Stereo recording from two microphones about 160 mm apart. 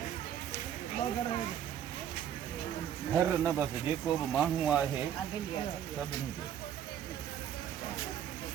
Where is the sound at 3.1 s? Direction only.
15° right (ahead or behind).